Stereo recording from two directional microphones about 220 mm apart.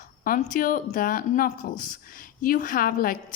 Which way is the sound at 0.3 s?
40° left (ahead or behind).